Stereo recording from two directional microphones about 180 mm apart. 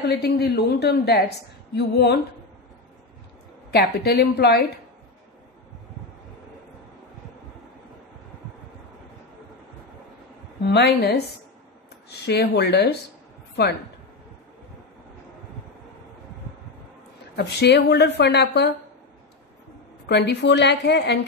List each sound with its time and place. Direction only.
0.1 s speech: 65° left (ahead or behind)
3.7 s speech: 65° left (ahead or behind)
10.6 s speech: 65° left (ahead or behind)
17.4 s speech: 65° left (ahead or behind)
20.1 s speech: 70° left (ahead or behind)